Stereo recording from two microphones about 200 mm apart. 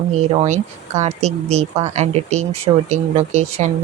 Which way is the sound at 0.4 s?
35° right (ahead or behind).